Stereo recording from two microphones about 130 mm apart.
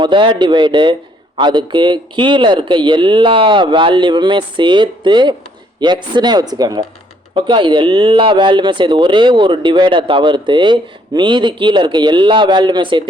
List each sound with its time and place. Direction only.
0.0 s speech: 40° right (ahead or behind)